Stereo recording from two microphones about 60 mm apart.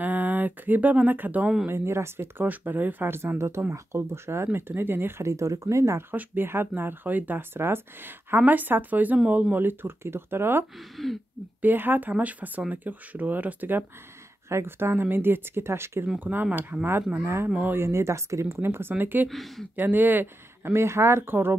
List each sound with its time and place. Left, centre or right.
0.0 s speech: right
1.7 s speech: right
2.4 s speech: right
5.2 s speech: right
6.1 s speech: right
11.0 s speech: centre
11.6 s speech: right
14.5 s speech: right
16.2 s speech: right
17.7 s speech: right
19.2 s speech: centre
19.7 s speech: right